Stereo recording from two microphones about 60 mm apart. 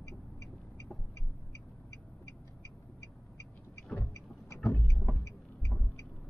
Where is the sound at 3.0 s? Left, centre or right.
Left.